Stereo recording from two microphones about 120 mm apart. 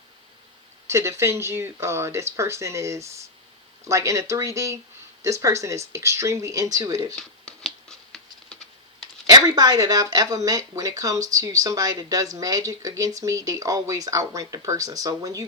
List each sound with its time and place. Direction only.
0.9 s speech: 25° right (ahead or behind)
7.2 s patter: 5° left (ahead or behind)
9.2 s speech: 35° right (ahead or behind)